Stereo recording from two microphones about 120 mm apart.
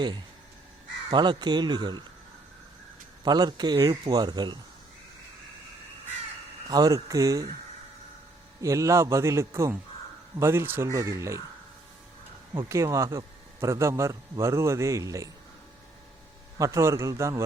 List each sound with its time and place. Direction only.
1.1 s speech: 40° right (ahead or behind)
3.2 s speech: 35° right (ahead or behind)
6.7 s speech: 30° right (ahead or behind)
8.6 s speech: 25° right (ahead or behind)
12.5 s speech: 25° right (ahead or behind)
16.6 s speech: 25° right (ahead or behind)